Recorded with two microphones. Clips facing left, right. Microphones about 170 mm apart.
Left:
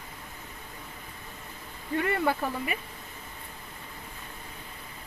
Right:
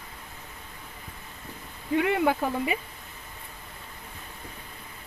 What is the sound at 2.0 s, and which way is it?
Speech, 15° right (ahead or behind).